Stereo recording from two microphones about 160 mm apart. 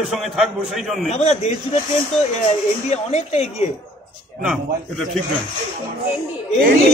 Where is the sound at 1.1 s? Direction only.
45° left (ahead or behind).